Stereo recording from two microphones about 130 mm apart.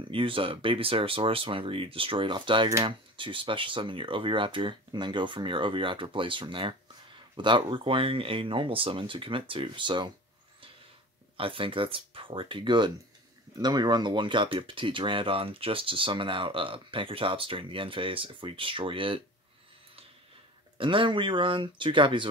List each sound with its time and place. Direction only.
0.1 s speech: 40° right (ahead or behind)
11.3 s speech: 45° right (ahead or behind)
20.7 s speech: 40° right (ahead or behind)